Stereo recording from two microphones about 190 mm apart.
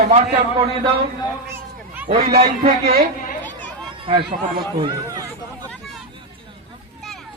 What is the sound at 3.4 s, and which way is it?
Chatter, 10° left (ahead or behind).